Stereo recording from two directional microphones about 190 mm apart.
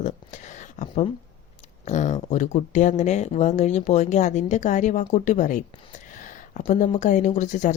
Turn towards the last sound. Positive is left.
turn(degrees=40)  # may be behind; listen again after turning